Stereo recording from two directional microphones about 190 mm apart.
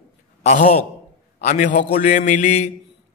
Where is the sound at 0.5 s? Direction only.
35° left (ahead or behind).